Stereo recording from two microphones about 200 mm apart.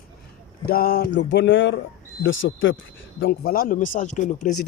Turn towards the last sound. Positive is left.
turn(degrees=40)  # may be behind; listen again after turning